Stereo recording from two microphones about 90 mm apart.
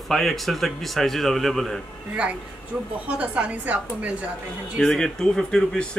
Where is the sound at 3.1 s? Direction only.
15° right (ahead or behind).